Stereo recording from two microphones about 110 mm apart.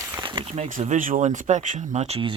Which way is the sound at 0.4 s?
80° right.